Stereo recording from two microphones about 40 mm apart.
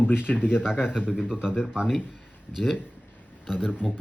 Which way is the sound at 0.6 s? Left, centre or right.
Centre.